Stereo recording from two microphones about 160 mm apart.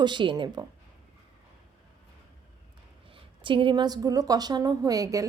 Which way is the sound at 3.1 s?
30° right (ahead or behind).